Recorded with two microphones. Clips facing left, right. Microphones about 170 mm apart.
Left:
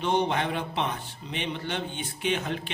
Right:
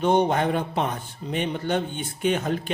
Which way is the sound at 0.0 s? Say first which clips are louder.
Right 5 dB; 45° right (ahead or behind).